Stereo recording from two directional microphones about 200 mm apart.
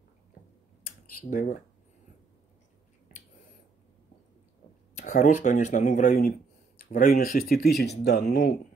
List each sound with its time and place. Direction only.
1.3 s speech: 40° left (ahead or behind)
4.9 s speech: 40° left (ahead or behind)